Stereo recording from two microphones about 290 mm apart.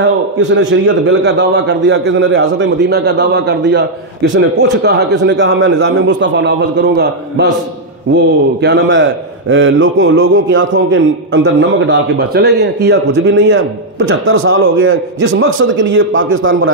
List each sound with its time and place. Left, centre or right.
0.4 s a man's voice: right